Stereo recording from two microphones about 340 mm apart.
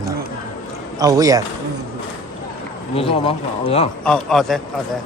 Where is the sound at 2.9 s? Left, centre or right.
Centre.